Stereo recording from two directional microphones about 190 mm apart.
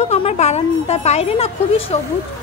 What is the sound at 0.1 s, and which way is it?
A woman's voice, 35° left (ahead or behind).